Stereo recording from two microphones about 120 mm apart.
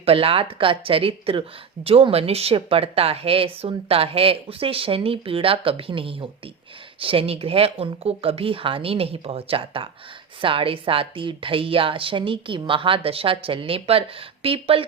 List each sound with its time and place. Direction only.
0.0 s speech: 50° right (ahead or behind)